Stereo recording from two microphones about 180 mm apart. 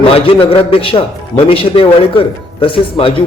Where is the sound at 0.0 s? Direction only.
30° left (ahead or behind).